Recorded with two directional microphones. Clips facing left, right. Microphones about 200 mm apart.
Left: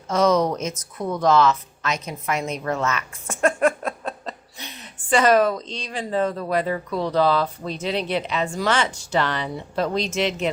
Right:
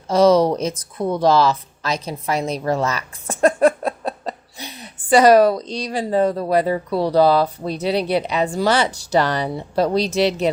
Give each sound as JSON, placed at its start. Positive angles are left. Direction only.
{"t": 0.1, "sound": "speech", "side_deg": -35}